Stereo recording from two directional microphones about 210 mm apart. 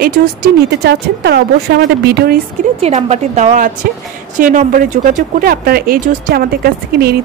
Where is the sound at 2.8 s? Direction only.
30° right (ahead or behind).